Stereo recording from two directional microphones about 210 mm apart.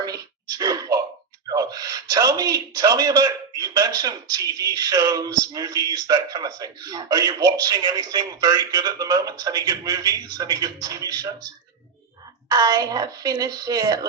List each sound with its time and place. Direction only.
0.0 s a sound: 20° right (ahead or behind)
3.6 s speech: 20° right (ahead or behind)
12.5 s speech: 15° right (ahead or behind)